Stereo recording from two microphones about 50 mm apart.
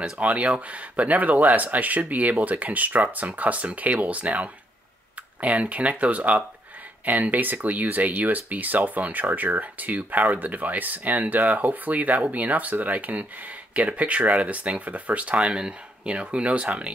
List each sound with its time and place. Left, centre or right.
0.0 s speech: right